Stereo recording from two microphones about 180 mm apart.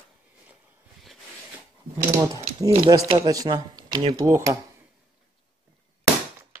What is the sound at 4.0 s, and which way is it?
Speech, 30° right (ahead or behind).